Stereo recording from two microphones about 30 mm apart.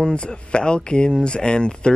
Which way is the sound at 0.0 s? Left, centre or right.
Left.